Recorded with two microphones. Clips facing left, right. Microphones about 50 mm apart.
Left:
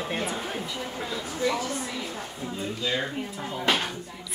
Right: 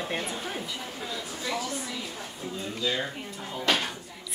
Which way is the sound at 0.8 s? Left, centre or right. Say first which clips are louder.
Left 4 dB; left.